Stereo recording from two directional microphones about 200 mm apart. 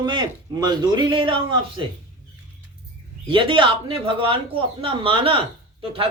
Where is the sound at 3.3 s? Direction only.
25° right (ahead or behind).